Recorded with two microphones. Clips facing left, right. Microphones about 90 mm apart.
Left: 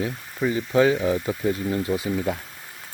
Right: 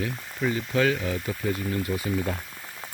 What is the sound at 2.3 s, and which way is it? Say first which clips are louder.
Speech: left 4 dB; 10° left (ahead or behind).